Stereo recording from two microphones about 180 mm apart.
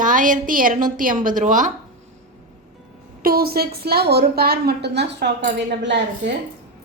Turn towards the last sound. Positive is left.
turn(degrees=-75)  # may be behind; listen again after turning